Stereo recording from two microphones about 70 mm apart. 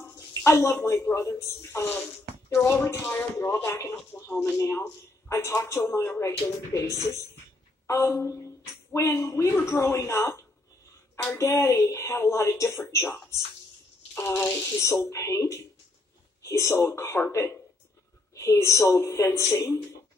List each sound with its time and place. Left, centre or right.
0.0 s a sound: left
1.4 s speech: left
14.1 s speech: left